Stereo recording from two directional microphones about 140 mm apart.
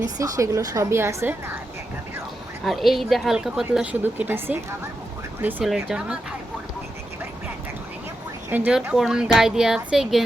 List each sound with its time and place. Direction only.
0.0 s a woman's voice: 25° right (ahead or behind)
2.6 s speech: centre (ahead or behind)
4.0 s a woman's voice: 15° right (ahead or behind)
8.4 s speech: 10° right (ahead or behind)